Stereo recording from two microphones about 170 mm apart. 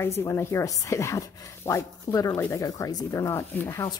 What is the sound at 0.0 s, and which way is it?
Speech, 15° left (ahead or behind).